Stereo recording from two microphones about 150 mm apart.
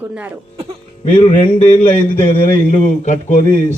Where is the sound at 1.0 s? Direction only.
35° left (ahead or behind).